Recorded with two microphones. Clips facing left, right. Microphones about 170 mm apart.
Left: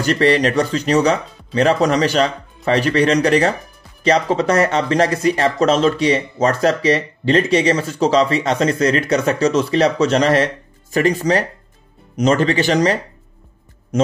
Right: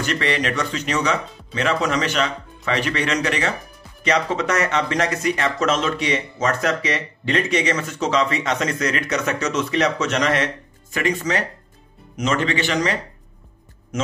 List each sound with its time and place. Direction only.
0.0 s speech: 35° left (ahead or behind)